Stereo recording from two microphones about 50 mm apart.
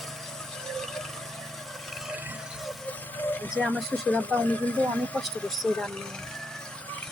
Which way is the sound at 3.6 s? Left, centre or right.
Centre.